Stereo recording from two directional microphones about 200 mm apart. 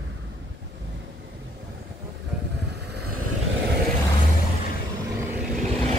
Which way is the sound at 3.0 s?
90° right.